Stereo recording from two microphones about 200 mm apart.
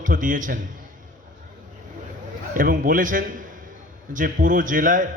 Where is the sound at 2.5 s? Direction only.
40° right (ahead or behind).